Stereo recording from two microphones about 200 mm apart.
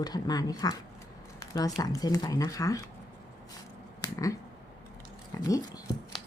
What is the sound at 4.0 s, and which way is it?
Finger snapping, 15° left (ahead or behind).